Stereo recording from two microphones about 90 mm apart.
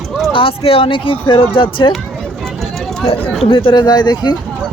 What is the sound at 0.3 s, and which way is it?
Speech, 85° left.